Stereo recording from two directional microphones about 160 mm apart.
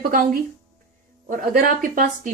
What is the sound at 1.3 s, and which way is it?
Speech, 65° right (ahead or behind).